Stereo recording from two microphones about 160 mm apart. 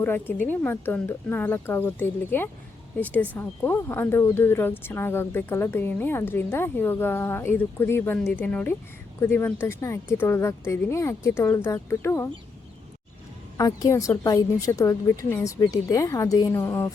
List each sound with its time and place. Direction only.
0.0 s speech: 10° left (ahead or behind)
13.6 s a woman's voice: 20° left (ahead or behind)